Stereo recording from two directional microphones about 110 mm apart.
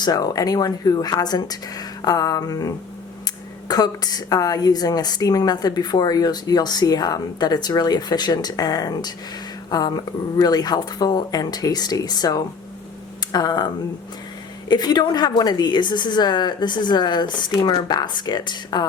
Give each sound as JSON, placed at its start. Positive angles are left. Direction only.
{"t": 0.0, "sound": "a woman's voice", "side_deg": 35}
{"t": 14.7, "sound": "a woman's voice", "side_deg": 40}